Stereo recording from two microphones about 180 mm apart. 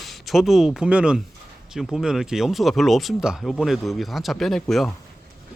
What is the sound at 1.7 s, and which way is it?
Speech, 5° right (ahead or behind).